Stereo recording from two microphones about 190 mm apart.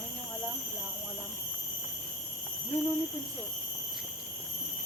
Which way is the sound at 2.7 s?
10° left (ahead or behind).